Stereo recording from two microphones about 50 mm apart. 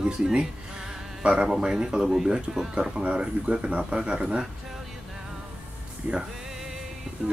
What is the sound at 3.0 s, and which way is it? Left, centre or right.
Speech, right.